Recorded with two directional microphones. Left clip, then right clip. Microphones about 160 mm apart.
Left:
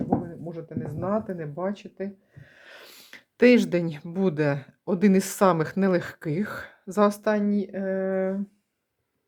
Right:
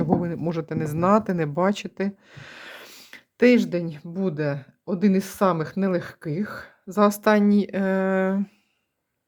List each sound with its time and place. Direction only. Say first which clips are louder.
0.3 s speech: right 9 dB; 45° right (ahead or behind)
2.6 s speech: right 5 dB; 15° right (ahead or behind)
7.1 s speech: right 5 dB; 20° right (ahead or behind)
7.4 s a sound: right 5 dB; 30° right (ahead or behind)